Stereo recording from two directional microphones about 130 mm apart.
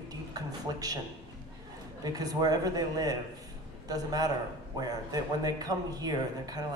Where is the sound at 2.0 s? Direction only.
30° right (ahead or behind).